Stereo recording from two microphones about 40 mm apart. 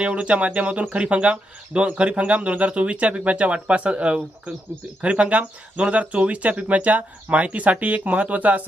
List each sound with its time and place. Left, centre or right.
0.0 s speech: right